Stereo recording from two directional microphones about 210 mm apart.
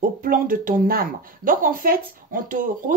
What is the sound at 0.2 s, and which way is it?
Speech, 40° right (ahead or behind).